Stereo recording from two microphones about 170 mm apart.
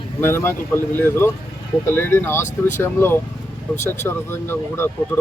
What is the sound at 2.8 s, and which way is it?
Speech, 15° left (ahead or behind).